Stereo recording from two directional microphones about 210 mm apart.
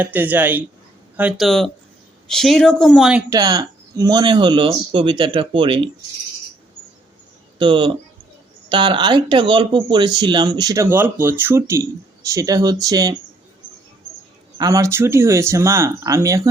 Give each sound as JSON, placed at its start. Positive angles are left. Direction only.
{"t": 0.0, "sound": "speech", "side_deg": -10}
{"t": 3.2, "sound": "speech", "side_deg": -15}
{"t": 7.6, "sound": "speech", "side_deg": -25}
{"t": 14.6, "sound": "speech", "side_deg": -15}